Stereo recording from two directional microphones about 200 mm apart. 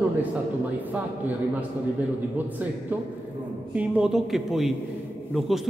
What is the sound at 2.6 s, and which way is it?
Speech, 10° right (ahead or behind).